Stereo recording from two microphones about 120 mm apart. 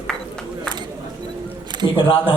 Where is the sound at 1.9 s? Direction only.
45° left (ahead or behind).